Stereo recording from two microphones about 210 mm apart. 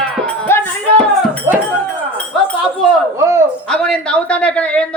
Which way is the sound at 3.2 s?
15° right (ahead or behind).